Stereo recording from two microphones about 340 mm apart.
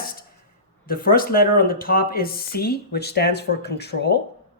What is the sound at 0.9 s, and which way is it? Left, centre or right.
Speech, left.